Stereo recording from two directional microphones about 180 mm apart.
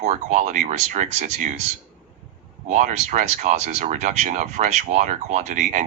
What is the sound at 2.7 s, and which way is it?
Speech, 40° right (ahead or behind).